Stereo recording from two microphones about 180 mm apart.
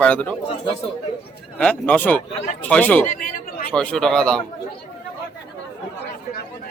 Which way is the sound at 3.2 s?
50° left (ahead or behind).